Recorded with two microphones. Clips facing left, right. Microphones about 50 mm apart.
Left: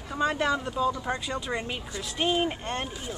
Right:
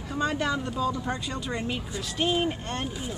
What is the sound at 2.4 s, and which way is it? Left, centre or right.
Speech, centre.